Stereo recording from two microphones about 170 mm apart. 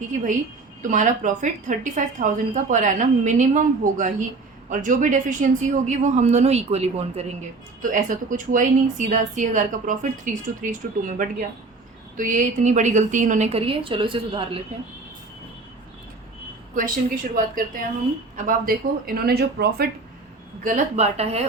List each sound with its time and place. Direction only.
0.8 s a woman's voice: 45° right (ahead or behind)
7.8 s a woman's voice: 50° right (ahead or behind); by 14.6 s 30° right (ahead or behind)
16.7 s a woman's voice: 50° right (ahead or behind); by 19.9 s 70° right (ahead or behind)
20.7 s speech: 45° right (ahead or behind)